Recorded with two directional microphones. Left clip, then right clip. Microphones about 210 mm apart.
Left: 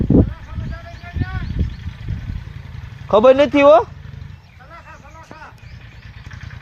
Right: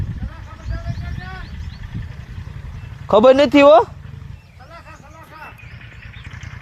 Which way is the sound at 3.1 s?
30° right (ahead or behind).